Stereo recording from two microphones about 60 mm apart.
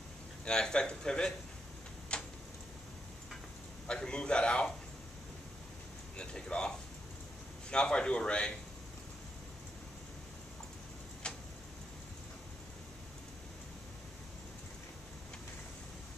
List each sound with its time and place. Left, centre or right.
0.5 s speech: centre
2.1 s tick-tock: centre
3.8 s a man's voice: centre
6.1 s speech: centre
7.7 s speech: centre
11.2 s tick-tock: centre